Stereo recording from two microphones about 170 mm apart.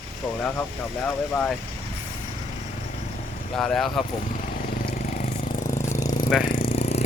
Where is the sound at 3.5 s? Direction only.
5° left (ahead or behind).